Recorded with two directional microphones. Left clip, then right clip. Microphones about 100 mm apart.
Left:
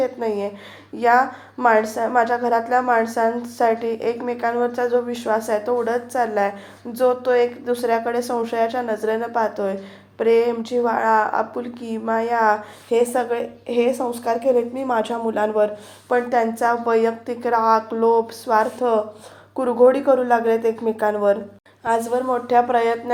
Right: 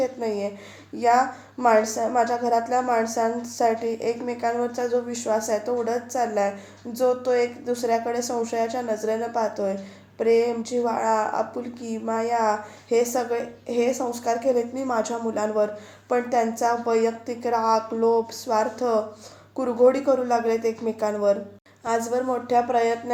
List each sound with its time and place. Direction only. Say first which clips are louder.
0.0 s a woman's voice: left 3 dB; 20° left (ahead or behind)